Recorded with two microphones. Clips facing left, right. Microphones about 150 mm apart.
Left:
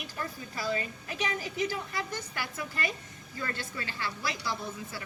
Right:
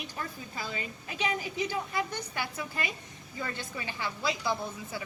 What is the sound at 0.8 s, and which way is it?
A woman's voice, 20° right (ahead or behind).